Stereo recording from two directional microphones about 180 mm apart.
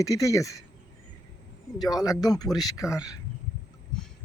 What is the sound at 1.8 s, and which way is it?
Speech, 20° left (ahead or behind).